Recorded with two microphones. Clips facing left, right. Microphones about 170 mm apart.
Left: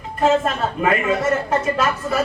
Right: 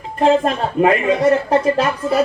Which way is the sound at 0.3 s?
35° right (ahead or behind).